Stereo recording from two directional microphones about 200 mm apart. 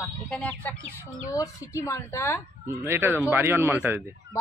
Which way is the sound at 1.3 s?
15° left (ahead or behind).